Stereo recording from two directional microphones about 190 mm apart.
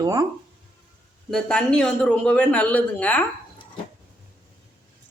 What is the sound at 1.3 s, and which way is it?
A man's voice, 5° left (ahead or behind).